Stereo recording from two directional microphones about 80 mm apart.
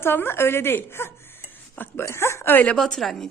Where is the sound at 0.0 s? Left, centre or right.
Left.